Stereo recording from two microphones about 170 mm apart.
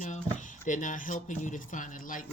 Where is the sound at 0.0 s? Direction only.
45° left (ahead or behind).